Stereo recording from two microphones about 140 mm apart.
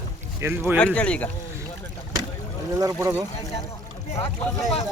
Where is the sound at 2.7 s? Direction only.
20° right (ahead or behind).